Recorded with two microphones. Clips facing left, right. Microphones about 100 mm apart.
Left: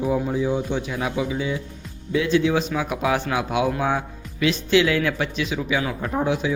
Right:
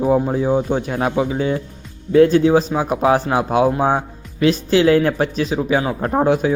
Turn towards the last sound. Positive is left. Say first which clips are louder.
# right 7 dB
turn(degrees=-50)  # may be behind; listen again after turning